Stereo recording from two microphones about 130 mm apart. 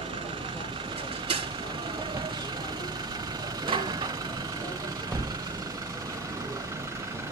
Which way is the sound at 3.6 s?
35° right (ahead or behind).